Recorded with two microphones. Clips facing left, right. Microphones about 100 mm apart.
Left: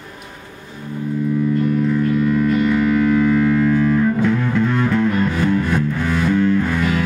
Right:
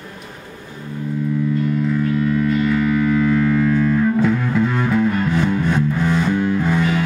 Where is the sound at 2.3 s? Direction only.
5° left (ahead or behind).